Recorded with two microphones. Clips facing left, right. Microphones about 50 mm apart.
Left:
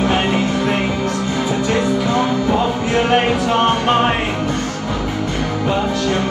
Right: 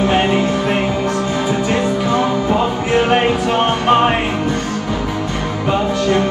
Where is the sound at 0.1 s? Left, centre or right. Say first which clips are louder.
Right 2 dB; right.